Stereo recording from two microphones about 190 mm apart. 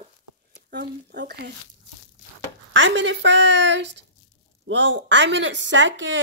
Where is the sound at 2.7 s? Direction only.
75° right (ahead or behind).